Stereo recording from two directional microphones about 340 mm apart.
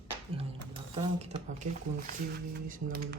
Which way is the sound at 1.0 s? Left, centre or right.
Centre.